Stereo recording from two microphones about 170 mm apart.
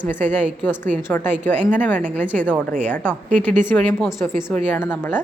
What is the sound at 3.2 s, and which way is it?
Speech, 45° right (ahead or behind).